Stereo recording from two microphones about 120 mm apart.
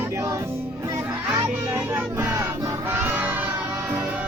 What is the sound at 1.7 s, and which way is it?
Music, 20° right (ahead or behind).